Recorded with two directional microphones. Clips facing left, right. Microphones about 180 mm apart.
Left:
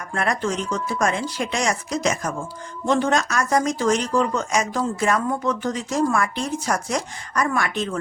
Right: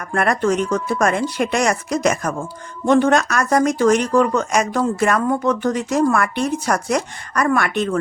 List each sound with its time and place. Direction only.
0.0 s speech: 60° right (ahead or behind)